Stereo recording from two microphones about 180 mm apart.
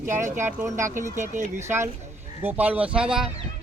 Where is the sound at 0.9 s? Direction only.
45° right (ahead or behind).